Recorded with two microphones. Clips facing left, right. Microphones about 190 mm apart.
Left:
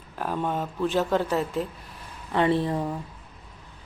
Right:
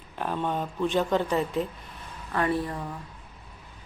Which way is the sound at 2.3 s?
25° left (ahead or behind).